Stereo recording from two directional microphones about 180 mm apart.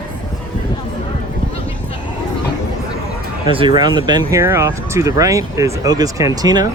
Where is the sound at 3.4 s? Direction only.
25° right (ahead or behind).